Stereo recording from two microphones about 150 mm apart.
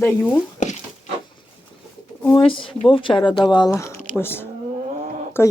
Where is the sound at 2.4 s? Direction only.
35° left (ahead or behind).